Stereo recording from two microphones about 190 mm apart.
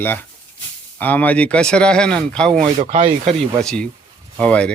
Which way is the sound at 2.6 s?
35° right (ahead or behind).